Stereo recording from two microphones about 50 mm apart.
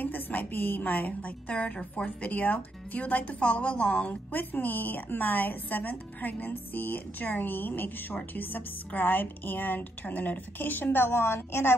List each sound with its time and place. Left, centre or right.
0.0 s a woman's voice: left; by 2.0 s centre
2.2 s a woman's voice: left